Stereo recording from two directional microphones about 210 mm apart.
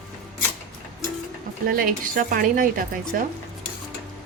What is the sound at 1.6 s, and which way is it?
Speech, 45° right (ahead or behind).